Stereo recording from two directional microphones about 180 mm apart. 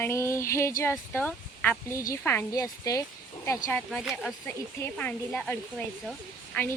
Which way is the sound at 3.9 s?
Centre (ahead or behind).